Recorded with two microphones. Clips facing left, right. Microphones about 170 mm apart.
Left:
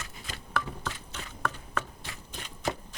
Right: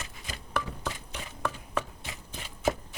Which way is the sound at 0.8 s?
15° right (ahead or behind).